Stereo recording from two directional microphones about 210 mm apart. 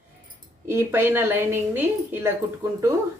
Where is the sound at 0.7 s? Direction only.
10° right (ahead or behind).